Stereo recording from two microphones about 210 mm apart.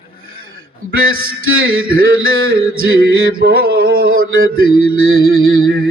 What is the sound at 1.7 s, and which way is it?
Mantra, 45° right (ahead or behind).